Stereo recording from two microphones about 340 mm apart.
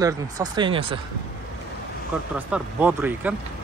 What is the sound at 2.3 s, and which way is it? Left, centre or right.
Speech, centre.